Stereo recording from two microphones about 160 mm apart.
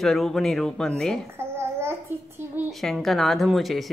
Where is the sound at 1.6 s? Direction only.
15° right (ahead or behind).